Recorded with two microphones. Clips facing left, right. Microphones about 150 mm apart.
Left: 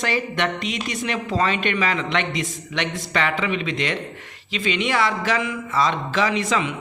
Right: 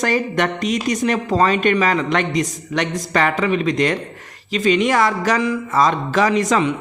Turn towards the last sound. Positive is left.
turn(degrees=-45)  # may be behind; listen again after turning